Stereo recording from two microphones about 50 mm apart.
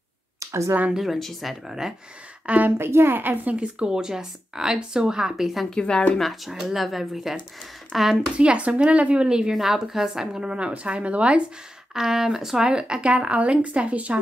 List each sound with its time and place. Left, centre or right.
0.4 s a sound: right
0.9 s speech: centre
1.7 s a woman's voice: centre
2.4 s a woman's voice: right
2.8 s a woman's voice: right
3.5 s a woman's voice: centre
5.7 s a woman's voice: centre
6.1 s speech: centre
8.4 s a woman's voice: right
11.9 s speech: centre; by 14.1 s right